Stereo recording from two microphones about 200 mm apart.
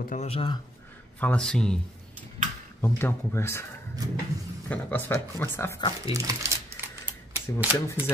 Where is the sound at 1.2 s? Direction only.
5° left (ahead or behind).